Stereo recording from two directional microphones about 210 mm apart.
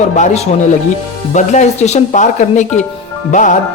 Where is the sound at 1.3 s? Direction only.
35° left (ahead or behind).